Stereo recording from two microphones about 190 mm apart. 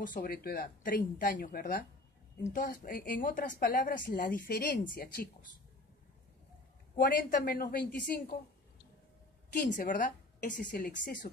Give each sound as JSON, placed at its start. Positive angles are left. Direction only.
{"t": 0.0, "sound": "a woman's voice", "side_deg": 45}
{"t": 7.0, "sound": "a woman's voice", "side_deg": 50}
{"t": 9.5, "sound": "a woman's voice", "side_deg": 45}